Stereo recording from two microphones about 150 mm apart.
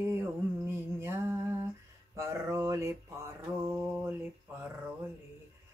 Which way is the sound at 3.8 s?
10° right (ahead or behind).